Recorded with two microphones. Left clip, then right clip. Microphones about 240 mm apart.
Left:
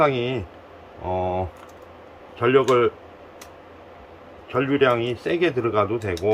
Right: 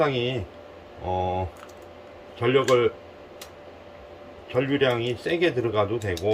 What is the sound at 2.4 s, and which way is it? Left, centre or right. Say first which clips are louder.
Speech: left 3 dB; centre.